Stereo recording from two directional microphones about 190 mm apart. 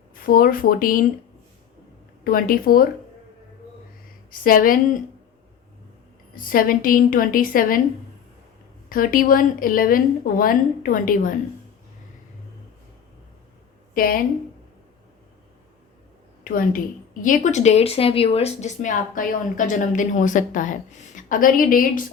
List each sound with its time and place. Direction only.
0.1 s speech: 50° left (ahead or behind)
2.2 s speech: 50° left (ahead or behind)
4.3 s speech: 45° left (ahead or behind)
6.3 s speech: 50° left (ahead or behind)
8.9 s speech: 45° left (ahead or behind)
13.9 s a woman's voice: 50° left (ahead or behind)
16.4 s a woman's voice: 50° left (ahead or behind)